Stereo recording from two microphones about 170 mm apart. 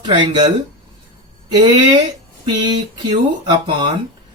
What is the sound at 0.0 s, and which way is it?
Speech, 30° right (ahead or behind).